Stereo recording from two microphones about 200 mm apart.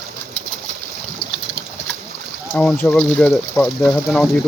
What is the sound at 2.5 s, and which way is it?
Speech, 5° left (ahead or behind).